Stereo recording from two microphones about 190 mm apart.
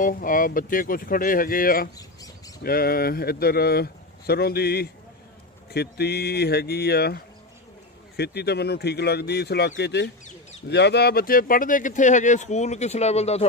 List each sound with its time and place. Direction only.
0.0 s speech: 45° left (ahead or behind)
2.0 s bird: 20° left (ahead or behind)
2.6 s speech: 55° left (ahead or behind)
8.2 s speech: 60° left (ahead or behind); by 13.5 s 35° left (ahead or behind)